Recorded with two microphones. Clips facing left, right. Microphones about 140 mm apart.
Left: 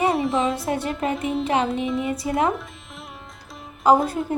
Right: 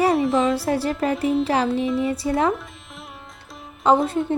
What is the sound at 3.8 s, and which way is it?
Speech, centre (ahead or behind).